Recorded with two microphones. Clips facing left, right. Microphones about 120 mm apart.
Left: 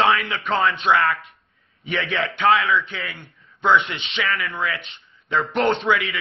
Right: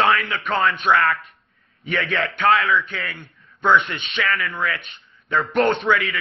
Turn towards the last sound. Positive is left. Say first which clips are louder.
# right 1 dB
turn(degrees=20)  # may be behind; listen again after turning